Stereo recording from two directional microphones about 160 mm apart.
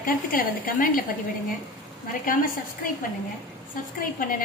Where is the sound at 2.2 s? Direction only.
60° left (ahead or behind).